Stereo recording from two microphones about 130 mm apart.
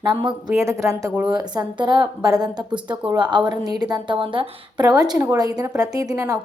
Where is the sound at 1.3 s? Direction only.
35° right (ahead or behind).